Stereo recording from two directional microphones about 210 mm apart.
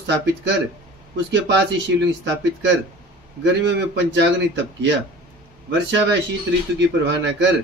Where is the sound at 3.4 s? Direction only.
60° right (ahead or behind).